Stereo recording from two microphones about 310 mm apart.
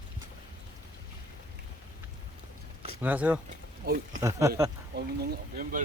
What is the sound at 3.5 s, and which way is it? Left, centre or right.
Speech, right.